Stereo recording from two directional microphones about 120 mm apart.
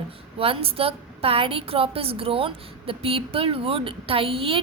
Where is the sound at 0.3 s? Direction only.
50° right (ahead or behind).